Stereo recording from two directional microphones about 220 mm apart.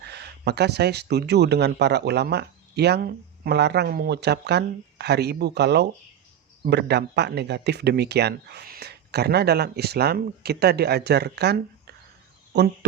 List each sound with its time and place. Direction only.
0.0 s speech: 50° right (ahead or behind)